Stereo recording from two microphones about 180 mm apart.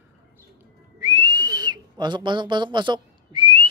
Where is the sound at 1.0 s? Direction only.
20° right (ahead or behind).